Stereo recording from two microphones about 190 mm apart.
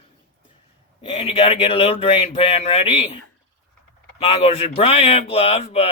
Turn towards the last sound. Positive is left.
turn(degrees=30)  # may be behind; listen again after turning